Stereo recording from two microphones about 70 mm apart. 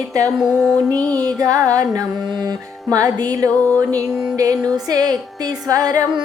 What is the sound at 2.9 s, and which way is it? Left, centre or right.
Music, right.